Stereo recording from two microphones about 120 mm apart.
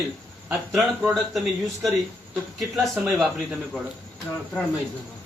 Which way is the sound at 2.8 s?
Centre (ahead or behind).